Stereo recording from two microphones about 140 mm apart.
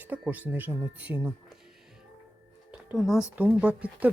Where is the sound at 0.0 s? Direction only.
10° right (ahead or behind).